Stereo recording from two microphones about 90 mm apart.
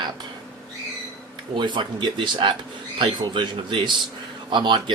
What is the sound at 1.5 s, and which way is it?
Speech, 60° right (ahead or behind).